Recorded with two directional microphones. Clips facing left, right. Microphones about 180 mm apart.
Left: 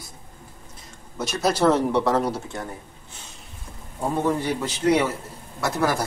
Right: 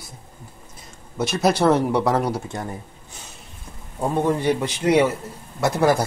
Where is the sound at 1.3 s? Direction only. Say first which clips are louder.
Right 2 dB; 10° right (ahead or behind).